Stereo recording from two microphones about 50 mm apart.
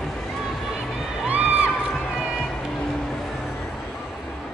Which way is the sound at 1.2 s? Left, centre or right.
Right.